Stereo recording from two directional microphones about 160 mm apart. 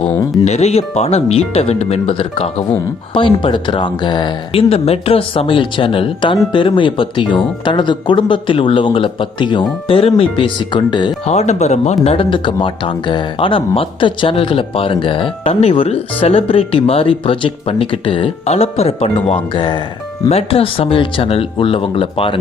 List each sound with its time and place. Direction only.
0.4 s speech: 45° left (ahead or behind)
11.3 s speech: 45° left (ahead or behind)
12.0 s speech: 35° left (ahead or behind)